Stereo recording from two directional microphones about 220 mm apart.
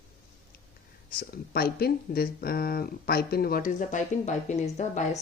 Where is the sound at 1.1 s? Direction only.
45° left (ahead or behind).